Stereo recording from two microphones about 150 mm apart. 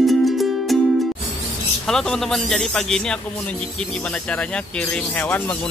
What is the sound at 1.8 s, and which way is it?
Speech, 5° left (ahead or behind).